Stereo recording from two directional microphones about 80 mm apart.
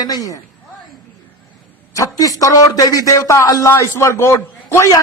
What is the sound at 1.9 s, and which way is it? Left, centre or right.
A man's voice, left.